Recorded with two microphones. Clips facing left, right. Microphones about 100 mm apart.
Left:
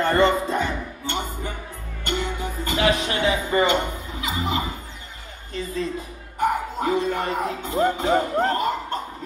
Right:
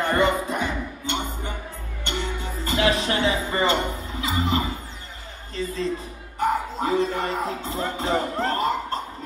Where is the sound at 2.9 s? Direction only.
35° right (ahead or behind).